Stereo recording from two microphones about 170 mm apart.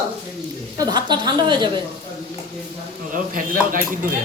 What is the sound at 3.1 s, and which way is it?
Speech, 55° right (ahead or behind).